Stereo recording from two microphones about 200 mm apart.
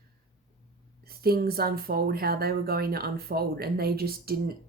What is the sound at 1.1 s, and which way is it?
Speech, 50° right (ahead or behind).